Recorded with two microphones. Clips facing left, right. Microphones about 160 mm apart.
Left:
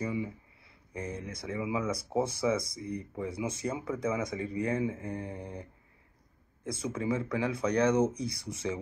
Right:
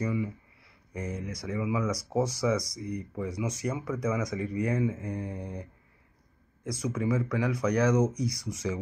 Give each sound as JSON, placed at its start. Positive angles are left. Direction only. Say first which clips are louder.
{"t": 0.0, "sound": "a sound", "louder": "right 3 dB", "side_deg": 25}
{"t": 1.0, "sound": "speech", "louder": "right 3 dB", "side_deg": -10}
{"t": 1.3, "sound": "speech", "louder": "right 3 dB", "side_deg": 25}
{"t": 6.6, "sound": "speech", "louder": "right 3 dB", "side_deg": 25}